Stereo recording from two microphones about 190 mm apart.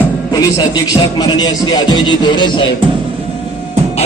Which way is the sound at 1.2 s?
20° left (ahead or behind).